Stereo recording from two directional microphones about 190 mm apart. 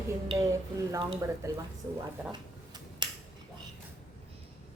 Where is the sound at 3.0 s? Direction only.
25° right (ahead or behind).